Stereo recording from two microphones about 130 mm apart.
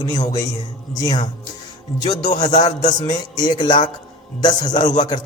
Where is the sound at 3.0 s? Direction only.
35° left (ahead or behind).